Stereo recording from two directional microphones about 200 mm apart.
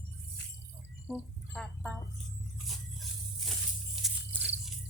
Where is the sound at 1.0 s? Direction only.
5° right (ahead or behind).